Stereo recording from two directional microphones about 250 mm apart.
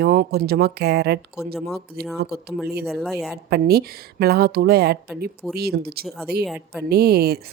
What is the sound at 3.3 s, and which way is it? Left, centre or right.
Speech, right.